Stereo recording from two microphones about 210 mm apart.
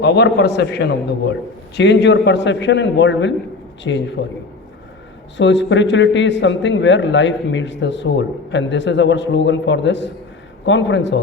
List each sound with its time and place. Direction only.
0.0 s a man's voice: 55° left (ahead or behind)
5.4 s a man's voice: 60° left (ahead or behind)